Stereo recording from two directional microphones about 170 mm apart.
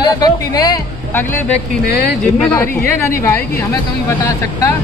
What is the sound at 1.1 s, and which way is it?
Speech, 10° left (ahead or behind).